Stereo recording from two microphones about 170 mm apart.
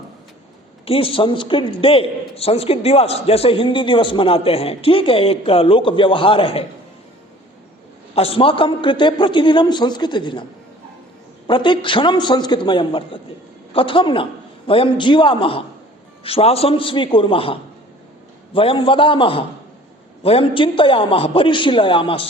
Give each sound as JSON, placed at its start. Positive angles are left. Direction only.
{"t": 0.9, "sound": "a man's voice", "side_deg": 30}
{"t": 8.1, "sound": "a man's voice", "side_deg": 35}
{"t": 11.4, "sound": "a man's voice", "side_deg": 30}